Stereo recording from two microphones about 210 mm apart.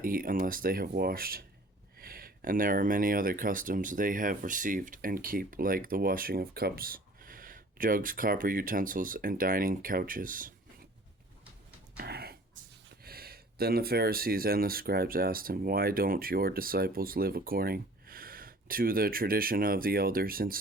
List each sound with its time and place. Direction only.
0.0 s speech: 40° right (ahead or behind)
11.9 s a sound: 50° right (ahead or behind)
13.0 s speech: 45° right (ahead or behind)